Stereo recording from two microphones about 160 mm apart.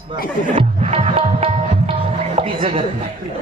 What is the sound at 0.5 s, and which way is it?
Music, 40° right (ahead or behind).